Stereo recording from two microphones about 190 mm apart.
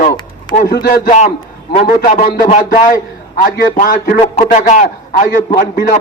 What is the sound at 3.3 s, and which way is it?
Speech, 50° left (ahead or behind).